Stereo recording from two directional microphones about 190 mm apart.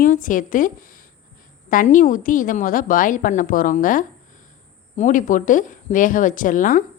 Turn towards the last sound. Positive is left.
turn(degrees=45)  # may be behind; listen again after turning